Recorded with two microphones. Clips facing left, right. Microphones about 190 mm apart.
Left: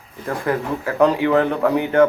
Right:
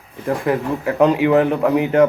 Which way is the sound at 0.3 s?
20° right (ahead or behind).